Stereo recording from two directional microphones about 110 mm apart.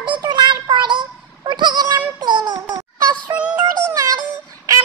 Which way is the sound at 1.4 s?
40° right (ahead or behind).